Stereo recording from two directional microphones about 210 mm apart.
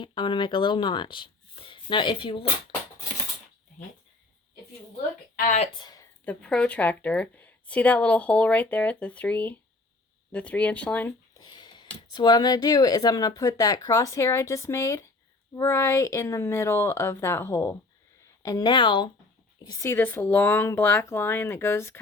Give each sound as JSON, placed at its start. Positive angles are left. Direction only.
{"t": 0.0, "sound": "speech", "side_deg": 20}
{"t": 5.4, "sound": "speech", "side_deg": 40}
{"t": 5.7, "sound": "speech", "side_deg": 20}
{"t": 6.2, "sound": "speech", "side_deg": 5}
{"t": 11.4, "sound": "a sound", "side_deg": 20}
{"t": 11.9, "sound": "speech", "side_deg": 20}